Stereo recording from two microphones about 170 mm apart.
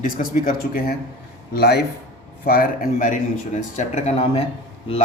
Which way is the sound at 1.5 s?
70° left (ahead or behind).